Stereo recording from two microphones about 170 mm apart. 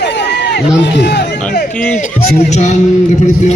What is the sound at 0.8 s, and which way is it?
Speech, 85° left.